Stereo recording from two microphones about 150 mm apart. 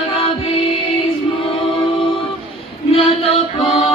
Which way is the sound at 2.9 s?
40° left (ahead or behind).